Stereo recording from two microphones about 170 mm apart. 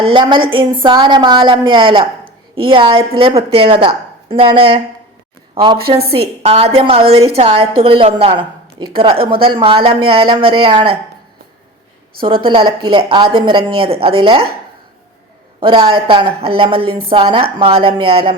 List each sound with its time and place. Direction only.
0.0 s a woman's voice: 30° right (ahead or behind)
5.9 s a woman's voice: 35° right (ahead or behind)
12.2 s a woman's voice: 30° right (ahead or behind)
15.6 s a woman's voice: 30° right (ahead or behind)